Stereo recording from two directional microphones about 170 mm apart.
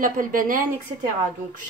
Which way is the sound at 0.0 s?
55° right (ahead or behind).